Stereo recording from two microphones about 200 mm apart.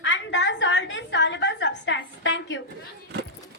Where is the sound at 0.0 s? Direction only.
65° left (ahead or behind).